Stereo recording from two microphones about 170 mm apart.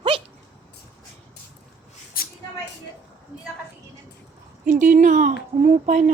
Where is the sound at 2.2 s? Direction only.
60° left (ahead or behind).